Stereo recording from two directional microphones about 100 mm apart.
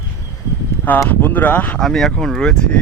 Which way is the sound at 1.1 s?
20° left (ahead or behind).